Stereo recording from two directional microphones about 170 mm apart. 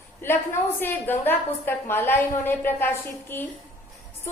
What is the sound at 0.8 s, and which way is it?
A woman's voice, 10° left (ahead or behind).